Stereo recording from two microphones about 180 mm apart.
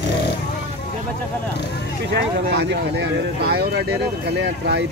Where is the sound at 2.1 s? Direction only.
70° right (ahead or behind).